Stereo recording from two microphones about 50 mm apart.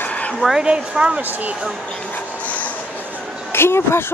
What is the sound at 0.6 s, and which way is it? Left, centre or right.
Speech, centre.